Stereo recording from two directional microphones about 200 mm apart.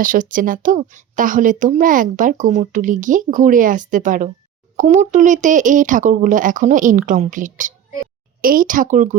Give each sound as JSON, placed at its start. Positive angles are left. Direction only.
{"t": 0.0, "sound": "speech", "side_deg": -40}